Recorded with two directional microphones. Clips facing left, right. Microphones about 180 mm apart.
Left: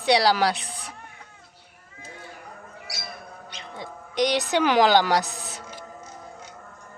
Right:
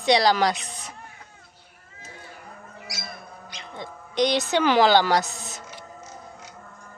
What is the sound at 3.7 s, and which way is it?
Speech, 10° left (ahead or behind).